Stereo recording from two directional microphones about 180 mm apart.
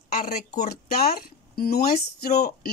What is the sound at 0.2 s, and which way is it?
A woman's voice, 50° left (ahead or behind).